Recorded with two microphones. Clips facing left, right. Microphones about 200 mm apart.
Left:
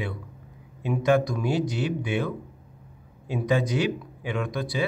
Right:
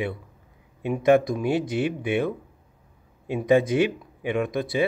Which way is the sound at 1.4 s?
55° right (ahead or behind).